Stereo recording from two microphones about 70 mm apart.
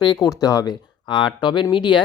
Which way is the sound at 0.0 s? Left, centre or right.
Left.